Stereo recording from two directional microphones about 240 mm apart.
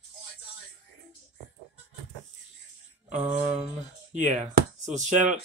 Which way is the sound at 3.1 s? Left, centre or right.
Centre.